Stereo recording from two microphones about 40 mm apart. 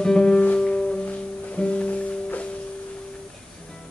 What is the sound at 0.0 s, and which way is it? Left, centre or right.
Music, left.